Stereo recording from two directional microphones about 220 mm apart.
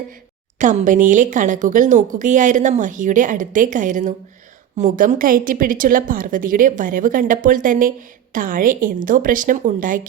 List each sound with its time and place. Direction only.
0.6 s a woman's voice: 35° right (ahead or behind)